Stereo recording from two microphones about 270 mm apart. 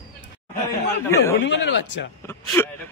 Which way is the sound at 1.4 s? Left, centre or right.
Left.